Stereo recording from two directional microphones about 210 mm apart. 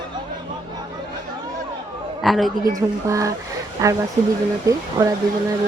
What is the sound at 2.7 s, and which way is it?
A woman's voice, 15° right (ahead or behind).